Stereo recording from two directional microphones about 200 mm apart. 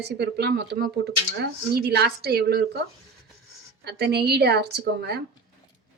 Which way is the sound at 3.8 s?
55° right (ahead or behind).